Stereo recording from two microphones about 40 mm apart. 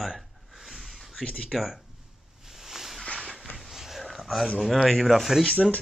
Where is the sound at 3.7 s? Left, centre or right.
Centre.